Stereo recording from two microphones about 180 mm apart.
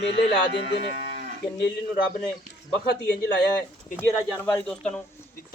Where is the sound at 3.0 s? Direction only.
70° left (ahead or behind).